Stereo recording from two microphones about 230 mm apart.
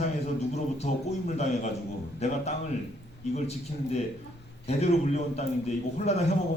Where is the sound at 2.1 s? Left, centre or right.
Left.